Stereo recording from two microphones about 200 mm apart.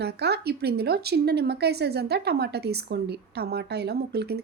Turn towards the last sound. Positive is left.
turn(degrees=-55)  # may be behind; listen again after turning